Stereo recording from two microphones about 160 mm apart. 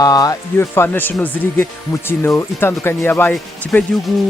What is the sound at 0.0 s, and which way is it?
Speech, 20° left (ahead or behind).